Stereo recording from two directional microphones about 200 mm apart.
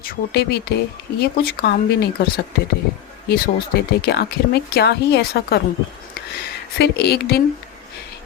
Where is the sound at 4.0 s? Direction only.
55° left (ahead or behind).